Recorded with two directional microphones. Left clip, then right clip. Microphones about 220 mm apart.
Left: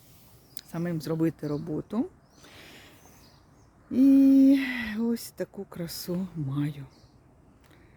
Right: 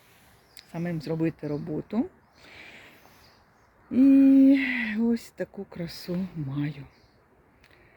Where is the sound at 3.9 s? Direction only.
5° left (ahead or behind).